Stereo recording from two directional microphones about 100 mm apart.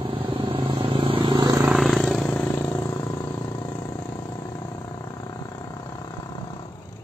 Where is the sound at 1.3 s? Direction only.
40° right (ahead or behind).